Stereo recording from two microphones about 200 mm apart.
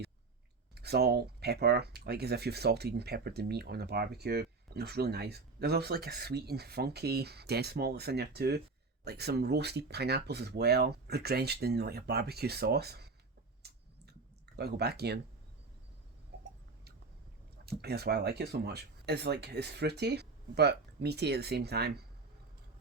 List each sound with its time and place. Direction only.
0.8 s speech: 55° right (ahead or behind)
13.6 s clicking: 55° right (ahead or behind)
16.3 s a sound: 55° right (ahead or behind)
17.7 s speech: 50° right (ahead or behind)